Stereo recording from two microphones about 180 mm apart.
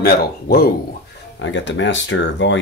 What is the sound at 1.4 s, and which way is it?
Speech, 90° left.